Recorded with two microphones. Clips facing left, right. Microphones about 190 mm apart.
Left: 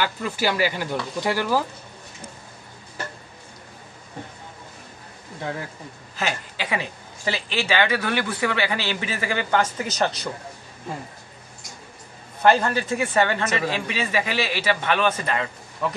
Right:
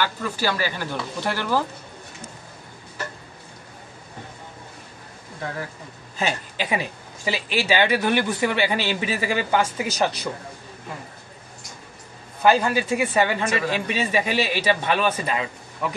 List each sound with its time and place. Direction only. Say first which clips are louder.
0.0 s speech: left 1 dB; 15° left (ahead or behind)
6.1 s speech: right 2 dB; 15° right (ahead or behind)
12.4 s speech: even; 10° right (ahead or behind)